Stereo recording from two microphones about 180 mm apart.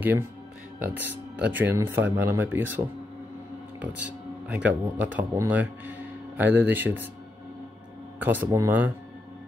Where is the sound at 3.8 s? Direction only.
5° right (ahead or behind).